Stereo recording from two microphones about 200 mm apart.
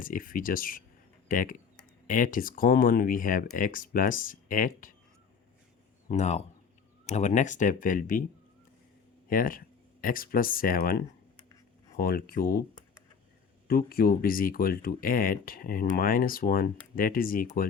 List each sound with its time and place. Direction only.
0.0 s speech: 45° left (ahead or behind)
6.1 s speech: 35° left (ahead or behind)
9.3 s speech: 45° left (ahead or behind)
13.7 s speech: 50° left (ahead or behind)